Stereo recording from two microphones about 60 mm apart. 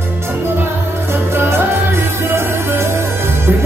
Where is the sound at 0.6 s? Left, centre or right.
Right.